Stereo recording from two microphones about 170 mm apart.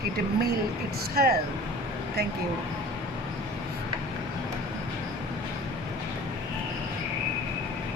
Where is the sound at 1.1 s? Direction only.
65° right (ahead or behind).